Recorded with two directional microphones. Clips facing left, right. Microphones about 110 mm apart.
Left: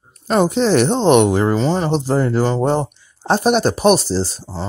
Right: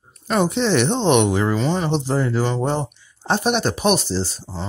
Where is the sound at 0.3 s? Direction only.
40° left (ahead or behind).